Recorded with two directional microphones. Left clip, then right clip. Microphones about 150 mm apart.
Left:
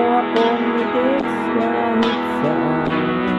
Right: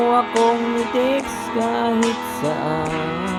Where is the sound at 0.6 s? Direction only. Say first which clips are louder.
Left 1 dB; 35° left (ahead or behind).